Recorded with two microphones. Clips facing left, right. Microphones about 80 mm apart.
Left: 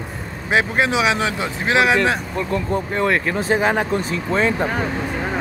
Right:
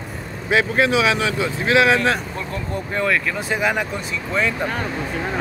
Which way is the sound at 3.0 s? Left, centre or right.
Left.